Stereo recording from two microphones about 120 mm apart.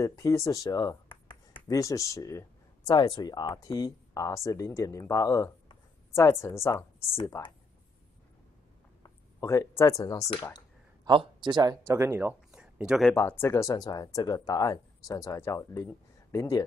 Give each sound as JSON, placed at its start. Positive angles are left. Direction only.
{"t": 0.0, "sound": "speech", "side_deg": 25}
{"t": 2.9, "sound": "speech", "side_deg": 35}
{"t": 9.0, "sound": "speech", "side_deg": 25}
{"t": 11.1, "sound": "speech", "side_deg": -40}
{"t": 11.9, "sound": "speech", "side_deg": -20}
{"t": 12.4, "sound": "a sound", "side_deg": -10}
{"t": 13.1, "sound": "speech", "side_deg": 20}